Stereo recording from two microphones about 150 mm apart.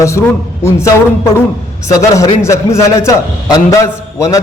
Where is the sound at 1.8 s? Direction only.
20° left (ahead or behind).